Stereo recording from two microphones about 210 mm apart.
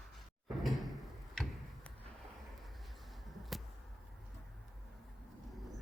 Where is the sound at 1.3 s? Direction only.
Centre (ahead or behind).